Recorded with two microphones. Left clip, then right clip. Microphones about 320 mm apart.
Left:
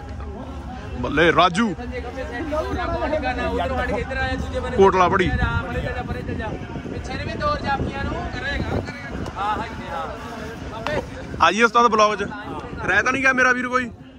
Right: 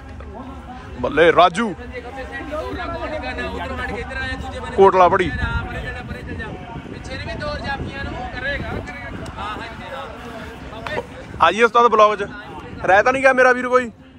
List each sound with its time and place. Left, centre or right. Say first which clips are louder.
1.0 s a man's voice: right 4 dB; centre
2.7 s speech: left 3 dB; centre
4.7 s a man's voice: right 4 dB; centre
7.1 s speech: left 3 dB; left
9.4 s a sound: left 5 dB; left
11.3 s a man's voice: right 2 dB; centre